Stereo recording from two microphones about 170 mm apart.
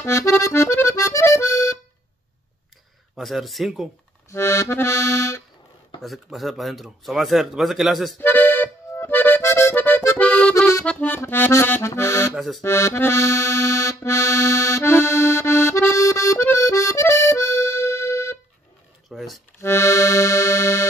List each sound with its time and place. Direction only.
0.0 s accordion: 15° left (ahead or behind)
3.2 s speech: centre (ahead or behind)
4.3 s accordion: 15° left (ahead or behind)
5.9 s speech: centre (ahead or behind)
8.2 s accordion: 10° left (ahead or behind)
12.4 s speech: centre (ahead or behind)
12.6 s accordion: 15° left (ahead or behind)
19.0 s a sound: centre (ahead or behind)
19.6 s accordion: 15° left (ahead or behind)